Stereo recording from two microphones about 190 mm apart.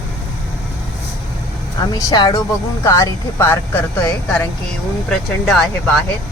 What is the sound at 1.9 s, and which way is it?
Speech, 20° left (ahead or behind).